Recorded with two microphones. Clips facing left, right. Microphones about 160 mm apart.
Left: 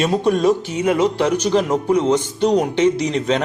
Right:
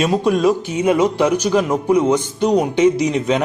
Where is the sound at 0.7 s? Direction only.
20° right (ahead or behind).